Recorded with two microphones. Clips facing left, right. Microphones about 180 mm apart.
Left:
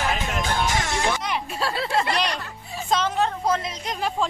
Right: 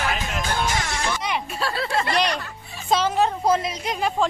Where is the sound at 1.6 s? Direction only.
20° left (ahead or behind).